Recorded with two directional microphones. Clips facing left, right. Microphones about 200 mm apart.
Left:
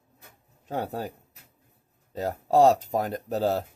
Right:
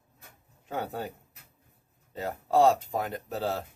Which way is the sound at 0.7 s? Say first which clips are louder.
Left 3 dB; 35° left (ahead or behind).